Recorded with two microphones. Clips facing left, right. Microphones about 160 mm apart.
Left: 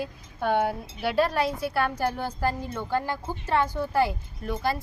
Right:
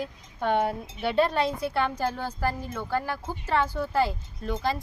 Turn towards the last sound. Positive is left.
turn(degrees=10)  # may be behind; listen again after turning